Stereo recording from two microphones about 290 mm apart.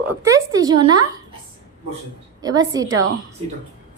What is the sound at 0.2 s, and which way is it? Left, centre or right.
Speech, centre.